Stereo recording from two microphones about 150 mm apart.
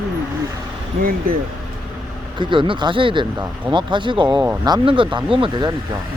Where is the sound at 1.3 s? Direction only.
70° right (ahead or behind).